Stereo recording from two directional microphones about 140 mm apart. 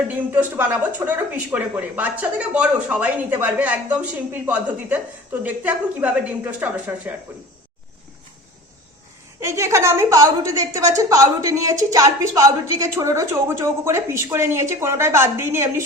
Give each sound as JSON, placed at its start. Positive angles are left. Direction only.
{"t": 0.1, "sound": "speech", "side_deg": -15}
{"t": 9.4, "sound": "a woman's voice", "side_deg": -20}